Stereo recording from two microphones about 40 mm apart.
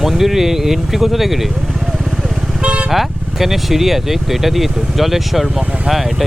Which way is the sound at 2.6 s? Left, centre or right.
Right.